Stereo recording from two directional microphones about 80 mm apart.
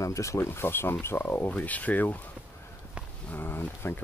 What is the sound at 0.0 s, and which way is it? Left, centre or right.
Speech, left.